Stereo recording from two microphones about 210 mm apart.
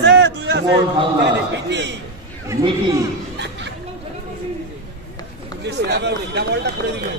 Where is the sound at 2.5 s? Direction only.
25° right (ahead or behind).